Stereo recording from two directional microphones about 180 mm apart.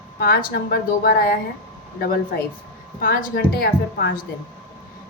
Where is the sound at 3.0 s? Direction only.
55° left (ahead or behind).